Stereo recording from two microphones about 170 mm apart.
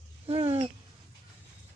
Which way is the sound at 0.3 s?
35° right (ahead or behind).